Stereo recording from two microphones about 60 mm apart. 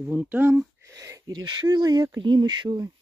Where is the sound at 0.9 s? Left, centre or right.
Right.